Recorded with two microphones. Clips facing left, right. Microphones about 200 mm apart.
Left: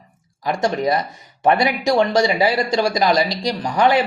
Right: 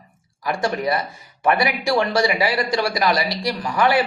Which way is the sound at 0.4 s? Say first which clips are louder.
Left 3 dB; 20° left (ahead or behind).